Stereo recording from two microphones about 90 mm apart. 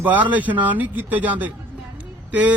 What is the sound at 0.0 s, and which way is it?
Speech, 20° right (ahead or behind).